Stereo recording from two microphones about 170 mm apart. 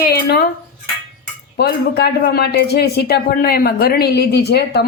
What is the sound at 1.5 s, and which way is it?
Speech, 70° left (ahead or behind).